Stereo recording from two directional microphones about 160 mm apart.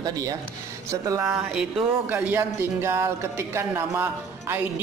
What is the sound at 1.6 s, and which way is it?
Speech, centre (ahead or behind).